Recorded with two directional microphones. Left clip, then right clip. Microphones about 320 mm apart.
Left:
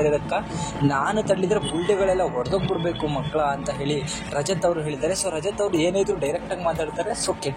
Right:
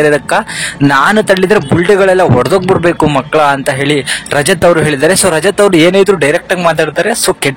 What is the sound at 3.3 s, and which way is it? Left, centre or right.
Speech, right.